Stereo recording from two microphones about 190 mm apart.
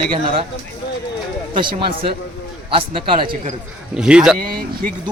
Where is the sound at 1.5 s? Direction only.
25° right (ahead or behind).